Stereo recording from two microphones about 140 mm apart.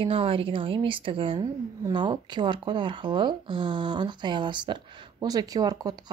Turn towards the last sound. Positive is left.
turn(degrees=-25)  # may be behind; listen again after turning